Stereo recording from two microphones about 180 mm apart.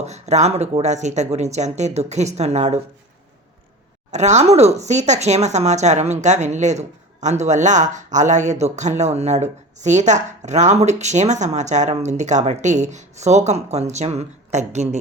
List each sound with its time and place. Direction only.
0.0 s speech: 40° right (ahead or behind)
4.1 s speech: 40° right (ahead or behind)